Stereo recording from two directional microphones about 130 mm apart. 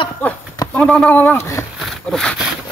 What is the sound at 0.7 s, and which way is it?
Speech, 10° left (ahead or behind).